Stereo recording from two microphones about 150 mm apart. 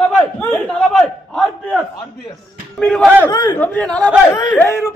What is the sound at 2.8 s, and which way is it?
Speech, 5° left (ahead or behind).